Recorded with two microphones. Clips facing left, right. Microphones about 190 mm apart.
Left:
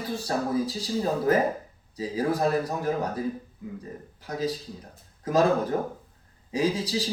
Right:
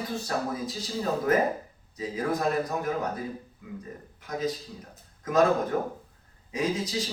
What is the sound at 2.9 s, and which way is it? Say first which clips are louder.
Speech: left 5 dB; 30° left (ahead or behind).